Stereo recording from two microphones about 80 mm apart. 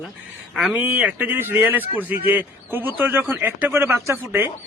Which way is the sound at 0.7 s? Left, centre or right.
Right.